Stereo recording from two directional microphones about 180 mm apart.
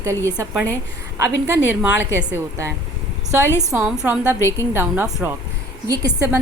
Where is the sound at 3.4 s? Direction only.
15° left (ahead or behind).